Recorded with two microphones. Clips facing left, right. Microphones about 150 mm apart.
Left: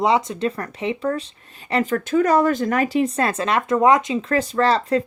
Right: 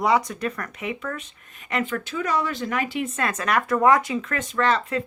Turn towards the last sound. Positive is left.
turn(degrees=35)  # may be behind; listen again after turning